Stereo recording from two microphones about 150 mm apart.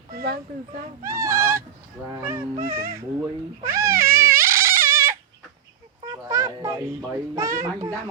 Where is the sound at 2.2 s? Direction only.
15° right (ahead or behind).